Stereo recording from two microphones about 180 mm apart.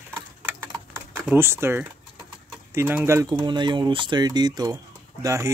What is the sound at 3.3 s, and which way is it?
Speech, 25° right (ahead or behind).